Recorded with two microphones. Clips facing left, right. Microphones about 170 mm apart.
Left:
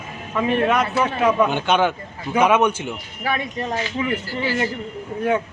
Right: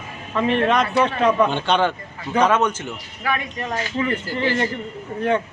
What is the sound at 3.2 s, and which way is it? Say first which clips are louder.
Speech: left 1 dB; 30° left (ahead or behind).